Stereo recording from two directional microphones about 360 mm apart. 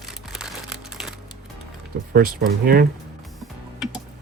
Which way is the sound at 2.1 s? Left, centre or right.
Right.